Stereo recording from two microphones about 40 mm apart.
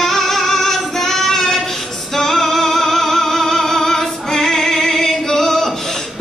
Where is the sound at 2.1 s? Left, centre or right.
Centre.